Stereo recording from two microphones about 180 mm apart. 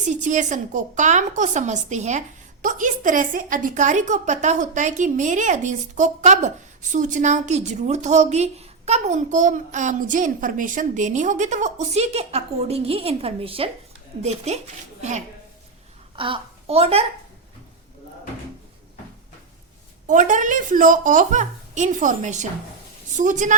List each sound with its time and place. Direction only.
0.0 s a woman's voice: 45° right (ahead or behind)
16.1 s a child's voice: 30° right (ahead or behind)
20.1 s a woman's voice: 45° right (ahead or behind)